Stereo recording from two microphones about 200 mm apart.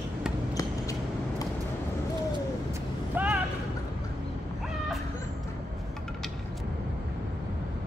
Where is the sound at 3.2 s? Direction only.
10° right (ahead or behind).